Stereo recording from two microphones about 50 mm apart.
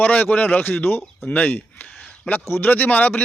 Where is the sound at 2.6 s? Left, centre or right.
Left.